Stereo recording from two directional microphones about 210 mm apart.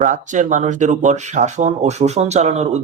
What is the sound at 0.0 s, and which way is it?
Speech, 35° right (ahead or behind).